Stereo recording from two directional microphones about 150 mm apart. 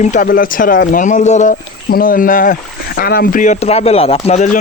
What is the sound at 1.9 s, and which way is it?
Speech, 75° left (ahead or behind).